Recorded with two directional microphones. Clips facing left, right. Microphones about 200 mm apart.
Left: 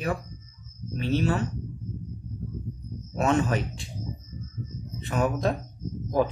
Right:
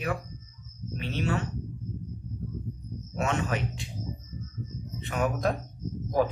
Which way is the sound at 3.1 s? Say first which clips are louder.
Left 5 dB; 35° left (ahead or behind).